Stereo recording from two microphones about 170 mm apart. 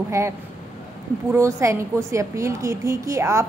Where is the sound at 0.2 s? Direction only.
15° right (ahead or behind).